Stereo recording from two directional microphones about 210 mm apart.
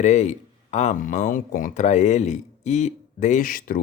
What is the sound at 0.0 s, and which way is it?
Speech, 35° left (ahead or behind).